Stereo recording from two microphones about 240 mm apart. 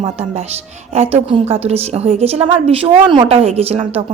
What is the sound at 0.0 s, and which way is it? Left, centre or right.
A woman's voice, right.